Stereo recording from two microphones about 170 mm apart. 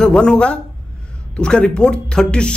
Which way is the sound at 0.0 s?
5° left (ahead or behind).